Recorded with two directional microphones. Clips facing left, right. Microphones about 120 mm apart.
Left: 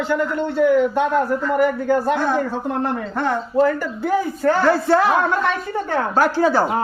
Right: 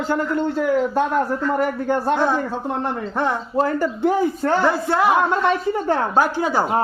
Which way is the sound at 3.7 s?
30° right (ahead or behind).